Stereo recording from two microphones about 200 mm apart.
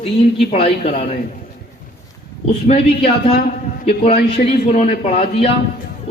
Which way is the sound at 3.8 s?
30° left (ahead or behind).